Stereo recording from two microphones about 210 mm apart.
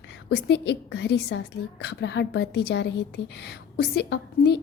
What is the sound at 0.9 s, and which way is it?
A woman's voice, 55° left (ahead or behind).